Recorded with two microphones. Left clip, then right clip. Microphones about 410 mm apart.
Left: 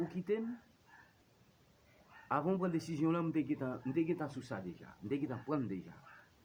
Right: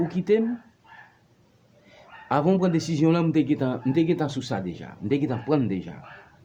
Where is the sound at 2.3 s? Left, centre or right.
Left.